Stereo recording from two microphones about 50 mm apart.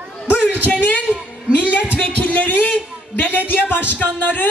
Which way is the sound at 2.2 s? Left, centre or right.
Left.